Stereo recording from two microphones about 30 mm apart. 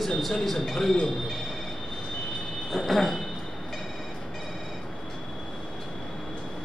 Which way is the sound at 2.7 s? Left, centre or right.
Centre.